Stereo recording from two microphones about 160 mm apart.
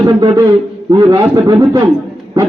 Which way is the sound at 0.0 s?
25° right (ahead or behind).